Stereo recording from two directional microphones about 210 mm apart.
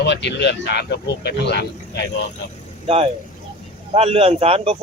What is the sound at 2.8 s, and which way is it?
Speech, 30° right (ahead or behind).